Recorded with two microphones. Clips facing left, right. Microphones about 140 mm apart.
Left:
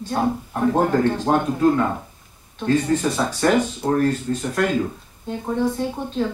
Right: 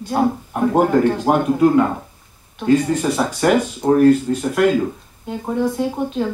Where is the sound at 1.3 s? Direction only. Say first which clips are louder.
Right 1 dB; 15° right (ahead or behind).